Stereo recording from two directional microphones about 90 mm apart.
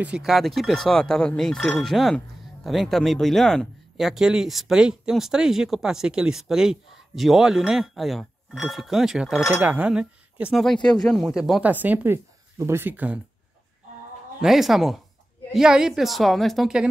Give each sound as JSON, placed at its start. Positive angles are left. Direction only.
{"t": 0.0, "sound": "speech", "side_deg": -5}
{"t": 9.6, "sound": "speech", "side_deg": -15}
{"t": 10.5, "sound": "speech", "side_deg": 5}
{"t": 11.6, "sound": "speech", "side_deg": -20}
{"t": 14.4, "sound": "speech", "side_deg": 0}